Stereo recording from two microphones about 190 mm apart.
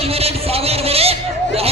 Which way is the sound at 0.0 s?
30° right (ahead or behind).